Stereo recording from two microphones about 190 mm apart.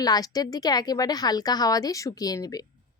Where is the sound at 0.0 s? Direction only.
20° left (ahead or behind).